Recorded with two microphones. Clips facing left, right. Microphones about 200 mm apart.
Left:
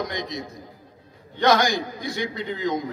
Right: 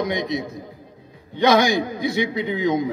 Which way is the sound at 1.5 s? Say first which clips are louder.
Right 3 dB; 60° right (ahead or behind).